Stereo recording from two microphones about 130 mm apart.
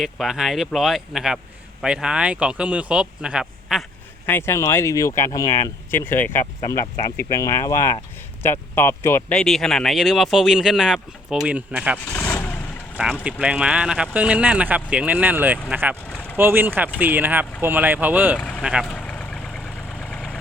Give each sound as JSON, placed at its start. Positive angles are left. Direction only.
{"t": 0.0, "sound": "a man's voice", "side_deg": 0}
{"t": 4.3, "sound": "speech", "side_deg": 20}
{"t": 5.9, "sound": "speech", "side_deg": 15}
{"t": 9.3, "sound": "speech", "side_deg": 5}
{"t": 12.1, "sound": "vehicle", "side_deg": 20}
{"t": 13.4, "sound": "a man's voice", "side_deg": -10}
{"t": 16.0, "sound": "vehicle", "side_deg": 10}
{"t": 16.4, "sound": "a man's voice", "side_deg": -15}
{"t": 18.3, "sound": "speech", "side_deg": 10}
{"t": 18.6, "sound": "vehicle", "side_deg": -5}